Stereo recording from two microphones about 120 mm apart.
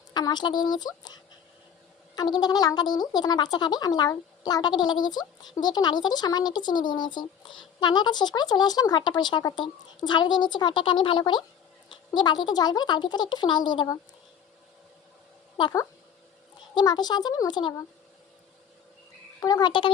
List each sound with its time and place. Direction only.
0.1 s speech: 35° left (ahead or behind)
16.7 s speech: 35° left (ahead or behind)
19.4 s speech: 35° left (ahead or behind)